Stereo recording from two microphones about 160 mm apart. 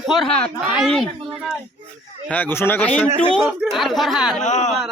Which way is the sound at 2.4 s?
10° left (ahead or behind).